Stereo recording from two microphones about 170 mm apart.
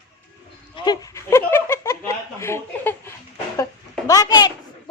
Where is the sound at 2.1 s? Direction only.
15° left (ahead or behind).